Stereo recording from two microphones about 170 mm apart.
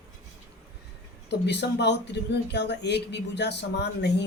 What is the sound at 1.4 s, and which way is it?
Speech, 85° left.